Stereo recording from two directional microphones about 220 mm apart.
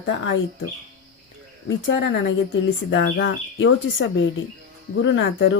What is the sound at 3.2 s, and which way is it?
Speech, 60° left (ahead or behind).